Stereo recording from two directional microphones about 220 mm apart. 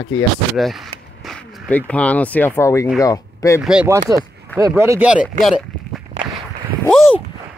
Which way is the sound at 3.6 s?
10° right (ahead or behind).